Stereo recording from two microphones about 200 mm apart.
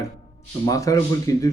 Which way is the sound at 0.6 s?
15° left (ahead or behind).